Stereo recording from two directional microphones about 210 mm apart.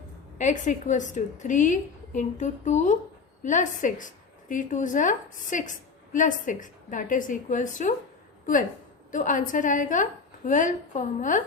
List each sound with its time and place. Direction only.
0.3 s a woman's voice: 35° left (ahead or behind)
9.1 s a woman's voice: 40° left (ahead or behind)